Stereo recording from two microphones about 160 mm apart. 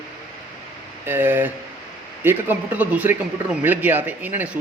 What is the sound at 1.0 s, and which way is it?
Speech, 15° right (ahead or behind).